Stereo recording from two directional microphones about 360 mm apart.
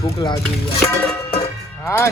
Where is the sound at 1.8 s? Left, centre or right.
Centre.